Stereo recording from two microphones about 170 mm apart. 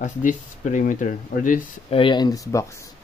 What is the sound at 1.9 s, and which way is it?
Speech, 30° left (ahead or behind).